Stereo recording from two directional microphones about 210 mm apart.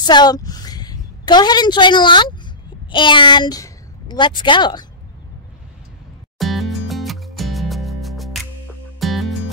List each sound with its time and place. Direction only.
0.0 s a woman's voice: 20° left (ahead or behind)
6.3 s music: centre (ahead or behind)